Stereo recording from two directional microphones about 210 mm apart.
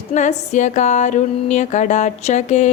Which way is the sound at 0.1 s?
35° left (ahead or behind).